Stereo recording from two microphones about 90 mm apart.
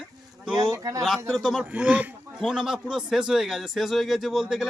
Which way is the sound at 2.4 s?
5° right (ahead or behind).